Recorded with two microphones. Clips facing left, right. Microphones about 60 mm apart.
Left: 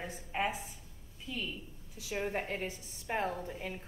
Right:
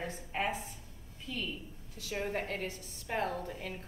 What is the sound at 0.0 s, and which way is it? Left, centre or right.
A woman's voice, centre.